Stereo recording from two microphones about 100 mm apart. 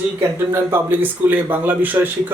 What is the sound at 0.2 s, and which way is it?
Speech, 25° right (ahead or behind).